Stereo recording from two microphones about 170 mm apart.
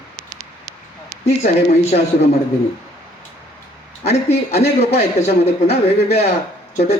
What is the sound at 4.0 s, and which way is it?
Speech, 40° left (ahead or behind).